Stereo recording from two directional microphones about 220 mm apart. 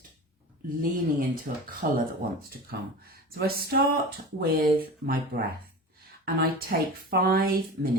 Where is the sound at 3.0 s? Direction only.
45° right (ahead or behind).